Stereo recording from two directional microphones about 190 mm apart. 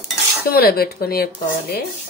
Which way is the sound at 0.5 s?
55° left (ahead or behind).